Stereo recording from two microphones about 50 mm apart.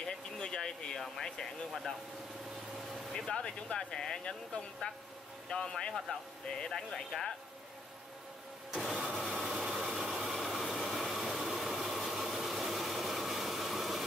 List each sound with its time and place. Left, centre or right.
0.0 s a sound: centre
1.0 s speech: centre
3.2 s speech: centre
8.7 s engine: centre